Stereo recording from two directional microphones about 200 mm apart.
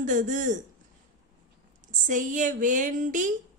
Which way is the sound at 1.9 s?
40° right (ahead or behind).